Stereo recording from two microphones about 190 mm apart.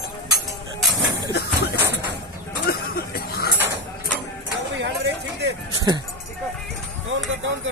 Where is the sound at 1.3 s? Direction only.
60° left (ahead or behind).